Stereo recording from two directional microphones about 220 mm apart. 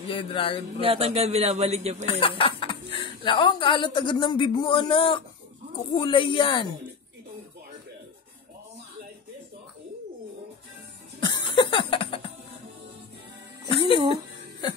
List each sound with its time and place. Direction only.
0.1 s speech: 25° left (ahead or behind)
0.7 s a man's voice: 25° right (ahead or behind)
2.0 s speech: 25° left (ahead or behind)
11.1 s a sound: 20° left (ahead or behind)
13.7 s music: 25° left (ahead or behind)